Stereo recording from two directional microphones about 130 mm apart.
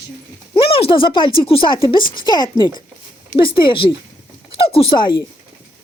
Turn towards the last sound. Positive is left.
turn(degrees=40)  # may be behind; listen again after turning